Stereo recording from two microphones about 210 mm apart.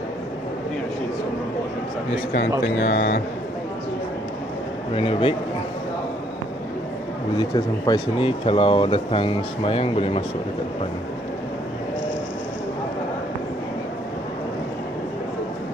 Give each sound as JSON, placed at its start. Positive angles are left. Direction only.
{"t": 2.6, "sound": "speech", "side_deg": 55}
{"t": 4.9, "sound": "speech", "side_deg": 25}
{"t": 7.3, "sound": "speech", "side_deg": 20}